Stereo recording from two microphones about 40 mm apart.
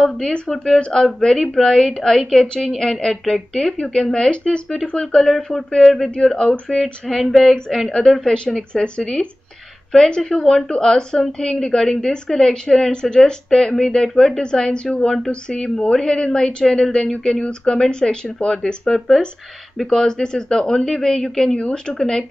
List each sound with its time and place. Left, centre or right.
0.9 s a woman's voice: centre
5.8 s a sound: centre
6.2 s speech: left
6.7 s a sound: centre
7.9 s a woman's voice: centre
8.5 s a woman's voice: left
15.4 s a woman's voice: left
18.9 s a sound: centre
19.8 s a woman's voice: centre
21.5 s speech: left
21.9 s a woman's voice: centre